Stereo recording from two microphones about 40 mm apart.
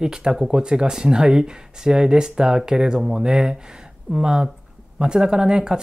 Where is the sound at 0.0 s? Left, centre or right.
Centre.